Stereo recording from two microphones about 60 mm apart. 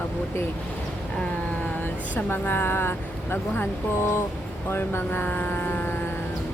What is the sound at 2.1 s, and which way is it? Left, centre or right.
Speech, left.